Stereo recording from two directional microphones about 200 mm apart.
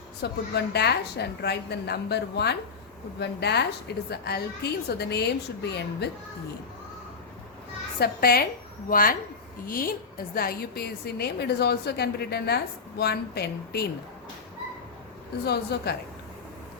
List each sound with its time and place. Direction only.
0.2 s a woman's voice: 55° left (ahead or behind)
7.9 s a woman's voice: 50° left (ahead or behind)
15.4 s a woman's voice: 55° left (ahead or behind)